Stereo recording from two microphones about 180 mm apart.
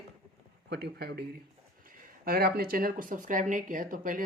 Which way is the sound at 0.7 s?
65° right (ahead or behind).